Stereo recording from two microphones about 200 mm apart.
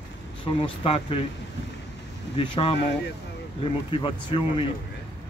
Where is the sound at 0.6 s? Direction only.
25° left (ahead or behind).